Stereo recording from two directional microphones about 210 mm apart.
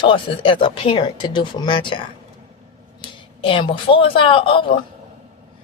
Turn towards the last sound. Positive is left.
turn(degrees=25)  # may be behind; listen again after turning